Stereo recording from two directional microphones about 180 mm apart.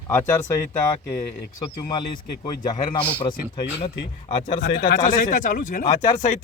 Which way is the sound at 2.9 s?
30° left (ahead or behind).